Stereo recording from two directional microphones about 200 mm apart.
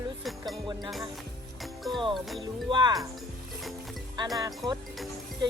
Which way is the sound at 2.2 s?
Centre (ahead or behind).